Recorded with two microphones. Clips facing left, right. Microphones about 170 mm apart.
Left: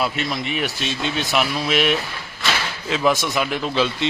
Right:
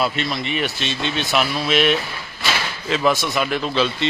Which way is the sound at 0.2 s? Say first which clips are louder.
Right 1 dB; 10° left (ahead or behind).